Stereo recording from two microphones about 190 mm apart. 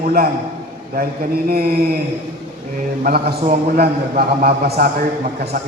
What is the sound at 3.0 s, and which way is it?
A man's voice, 55° right (ahead or behind).